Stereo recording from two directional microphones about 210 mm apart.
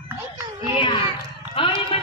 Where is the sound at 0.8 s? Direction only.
25° left (ahead or behind).